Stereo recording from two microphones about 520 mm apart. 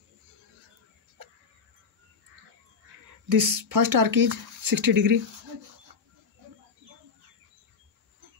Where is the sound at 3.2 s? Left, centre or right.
Right.